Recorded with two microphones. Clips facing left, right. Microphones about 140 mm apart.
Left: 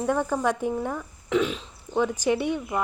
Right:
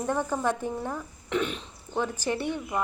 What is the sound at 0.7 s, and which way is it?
Speech, 10° right (ahead or behind).